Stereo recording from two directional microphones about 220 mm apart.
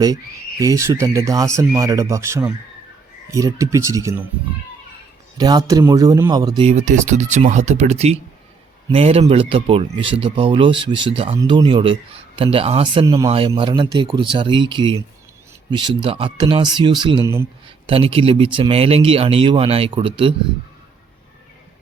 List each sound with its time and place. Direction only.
0.6 s speech: 15° right (ahead or behind)
5.4 s speech: 15° right (ahead or behind)
6.6 s speech: 30° right (ahead or behind)